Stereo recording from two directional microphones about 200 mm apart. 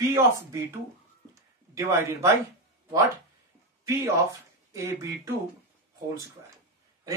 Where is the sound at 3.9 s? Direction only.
15° right (ahead or behind).